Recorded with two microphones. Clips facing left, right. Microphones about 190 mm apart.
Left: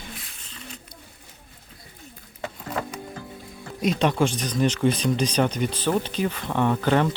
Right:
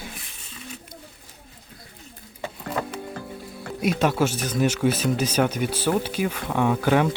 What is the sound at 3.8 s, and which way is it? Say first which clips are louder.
Speech: even; 5° right (ahead or behind).